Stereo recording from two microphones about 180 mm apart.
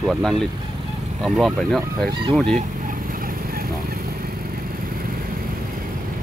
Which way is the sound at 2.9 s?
50° right (ahead or behind).